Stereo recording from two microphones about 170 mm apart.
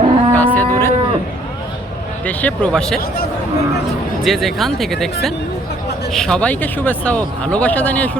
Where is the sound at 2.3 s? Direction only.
10° left (ahead or behind).